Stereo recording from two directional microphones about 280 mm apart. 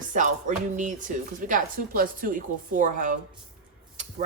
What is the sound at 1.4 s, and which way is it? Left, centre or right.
Speech, right.